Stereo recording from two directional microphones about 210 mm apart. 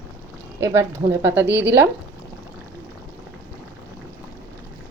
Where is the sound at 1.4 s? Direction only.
55° right (ahead or behind).